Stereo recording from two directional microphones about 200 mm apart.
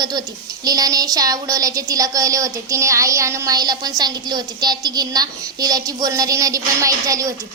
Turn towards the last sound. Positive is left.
turn(degrees=-15)  # may be behind; listen again after turning